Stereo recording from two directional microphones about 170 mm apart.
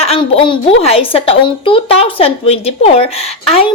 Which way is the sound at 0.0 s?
30° left (ahead or behind).